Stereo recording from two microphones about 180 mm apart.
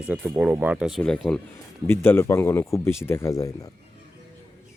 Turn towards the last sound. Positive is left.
turn(degrees=20)  # may be behind; listen again after turning